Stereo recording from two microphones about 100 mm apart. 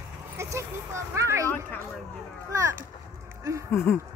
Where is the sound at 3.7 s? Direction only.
30° left (ahead or behind).